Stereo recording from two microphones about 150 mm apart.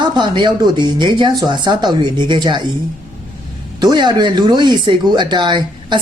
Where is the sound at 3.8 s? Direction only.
30° right (ahead or behind).